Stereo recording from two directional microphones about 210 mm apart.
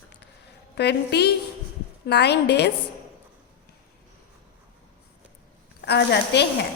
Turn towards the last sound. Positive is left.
turn(degrees=55)  # may be behind; listen again after turning